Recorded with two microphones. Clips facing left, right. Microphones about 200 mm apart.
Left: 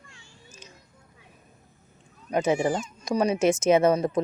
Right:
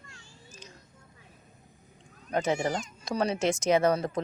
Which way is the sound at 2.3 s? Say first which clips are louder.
Left 4 dB; 20° left (ahead or behind).